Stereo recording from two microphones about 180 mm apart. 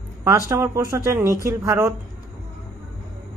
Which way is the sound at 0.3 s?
15° right (ahead or behind).